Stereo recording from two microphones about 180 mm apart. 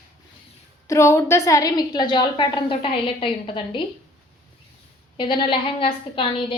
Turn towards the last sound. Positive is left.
turn(degrees=30)  # may be behind; listen again after turning